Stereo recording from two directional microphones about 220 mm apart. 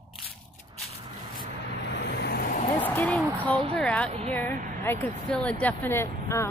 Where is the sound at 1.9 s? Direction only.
50° left (ahead or behind).